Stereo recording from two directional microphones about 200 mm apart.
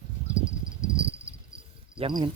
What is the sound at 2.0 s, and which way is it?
Speech, 25° right (ahead or behind).